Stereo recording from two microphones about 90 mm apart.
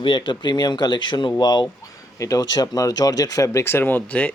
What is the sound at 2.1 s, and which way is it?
Speech, 40° left (ahead or behind).